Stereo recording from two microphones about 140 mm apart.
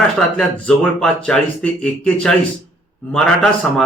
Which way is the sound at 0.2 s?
5° left (ahead or behind).